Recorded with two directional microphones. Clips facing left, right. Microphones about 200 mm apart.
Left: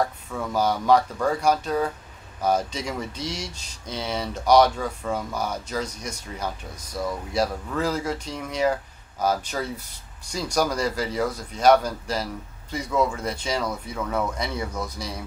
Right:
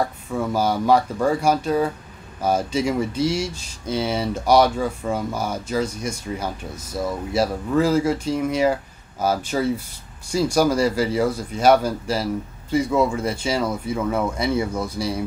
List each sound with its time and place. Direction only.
0.4 s speech: 10° right (ahead or behind)
6.9 s speech: 25° right (ahead or behind)
7.3 s speech: 5° right (ahead or behind)